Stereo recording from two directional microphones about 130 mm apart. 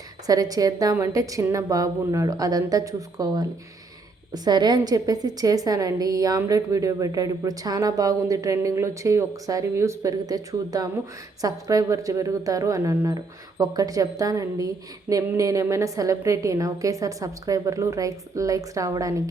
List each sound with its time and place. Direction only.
0.3 s a woman's voice: 30° right (ahead or behind)
4.4 s a woman's voice: 35° right (ahead or behind)